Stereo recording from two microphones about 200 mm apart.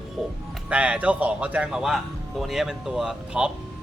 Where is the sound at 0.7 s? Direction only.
5° right (ahead or behind).